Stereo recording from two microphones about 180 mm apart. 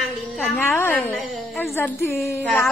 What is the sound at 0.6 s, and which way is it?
Speech, 10° left (ahead or behind).